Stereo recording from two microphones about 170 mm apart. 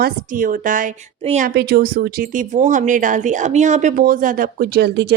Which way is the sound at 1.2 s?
40° right (ahead or behind).